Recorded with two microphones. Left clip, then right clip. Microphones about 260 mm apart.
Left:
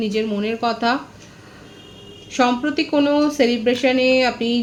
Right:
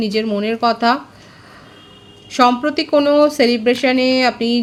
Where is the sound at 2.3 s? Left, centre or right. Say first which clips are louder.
Right 5 dB; right.